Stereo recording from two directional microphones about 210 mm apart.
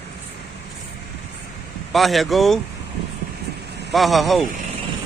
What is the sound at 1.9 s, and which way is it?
Speech, centre (ahead or behind).